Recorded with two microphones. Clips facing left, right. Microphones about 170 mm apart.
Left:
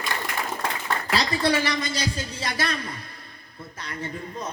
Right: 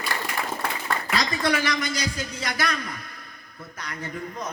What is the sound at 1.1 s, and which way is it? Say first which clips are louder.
A man's voice: left 2 dB; 30° left (ahead or behind).